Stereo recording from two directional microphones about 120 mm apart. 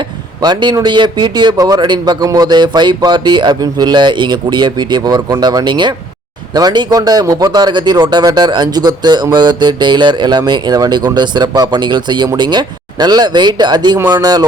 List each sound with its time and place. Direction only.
0.4 s a man's voice: 35° right (ahead or behind)